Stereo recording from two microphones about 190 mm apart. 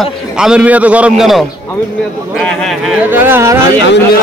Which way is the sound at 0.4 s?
5° right (ahead or behind).